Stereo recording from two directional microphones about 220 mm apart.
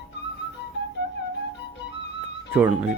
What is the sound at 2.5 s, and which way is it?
Speech, 5° right (ahead or behind).